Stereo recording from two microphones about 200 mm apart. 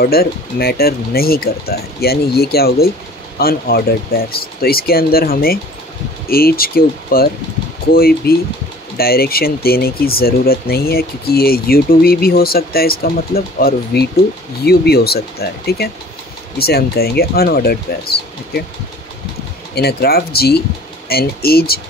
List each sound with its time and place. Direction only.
0.0 s speech: 50° left (ahead or behind)
19.7 s speech: 50° left (ahead or behind)